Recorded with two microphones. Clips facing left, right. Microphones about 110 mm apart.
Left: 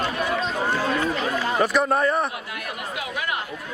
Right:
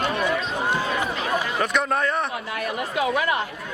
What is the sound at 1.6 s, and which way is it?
Speech, 5° left (ahead or behind).